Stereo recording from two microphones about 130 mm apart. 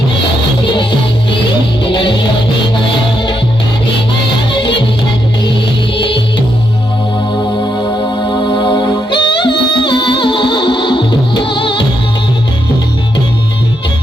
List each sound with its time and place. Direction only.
0.6 s music: 40° left (ahead or behind)
9.0 s music: 35° left (ahead or behind)